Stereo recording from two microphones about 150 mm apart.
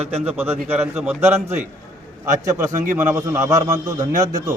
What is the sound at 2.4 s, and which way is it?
A man's voice, 20° right (ahead or behind).